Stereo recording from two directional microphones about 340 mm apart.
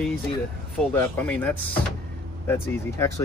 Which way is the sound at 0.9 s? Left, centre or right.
Centre.